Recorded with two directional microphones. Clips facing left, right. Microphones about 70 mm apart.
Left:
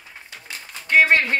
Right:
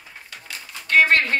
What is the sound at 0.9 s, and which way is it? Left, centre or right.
Speech, centre.